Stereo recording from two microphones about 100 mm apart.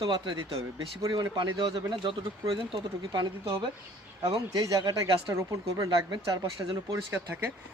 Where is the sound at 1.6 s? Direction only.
60° right (ahead or behind).